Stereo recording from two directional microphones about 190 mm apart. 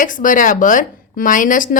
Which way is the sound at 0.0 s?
45° left (ahead or behind).